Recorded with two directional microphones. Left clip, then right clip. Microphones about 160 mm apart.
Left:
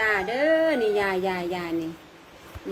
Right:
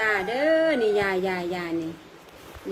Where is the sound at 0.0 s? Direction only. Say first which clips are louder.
Even; 25° right (ahead or behind).